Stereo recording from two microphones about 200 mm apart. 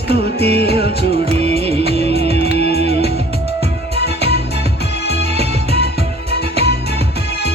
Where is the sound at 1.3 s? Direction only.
30° right (ahead or behind).